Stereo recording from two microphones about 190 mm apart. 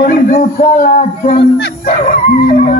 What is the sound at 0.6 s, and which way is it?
Speech, 40° left (ahead or behind).